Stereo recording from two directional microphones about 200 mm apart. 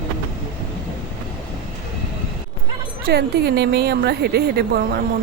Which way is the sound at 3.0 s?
55° right (ahead or behind).